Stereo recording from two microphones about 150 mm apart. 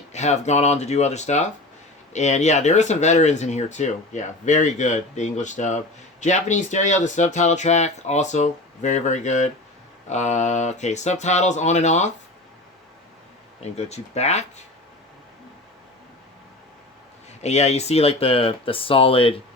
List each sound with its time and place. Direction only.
0.1 s speech: 50° left (ahead or behind)
13.6 s speech: 45° left (ahead or behind)
17.4 s speech: 45° left (ahead or behind)